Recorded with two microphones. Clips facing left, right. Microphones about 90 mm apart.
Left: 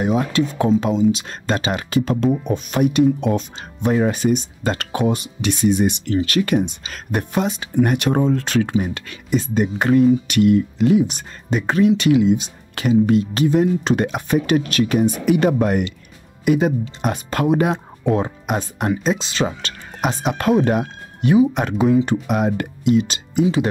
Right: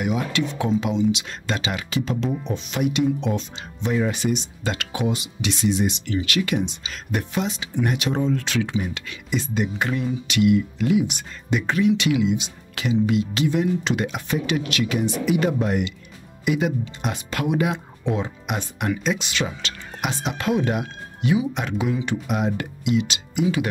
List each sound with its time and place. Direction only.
0.0 s speech: 35° left (ahead or behind)